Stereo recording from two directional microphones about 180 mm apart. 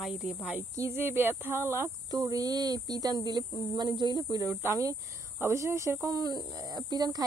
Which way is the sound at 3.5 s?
20° left (ahead or behind).